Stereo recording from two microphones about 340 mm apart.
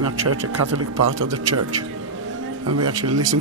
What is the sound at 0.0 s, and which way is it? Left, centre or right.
A man's voice, right.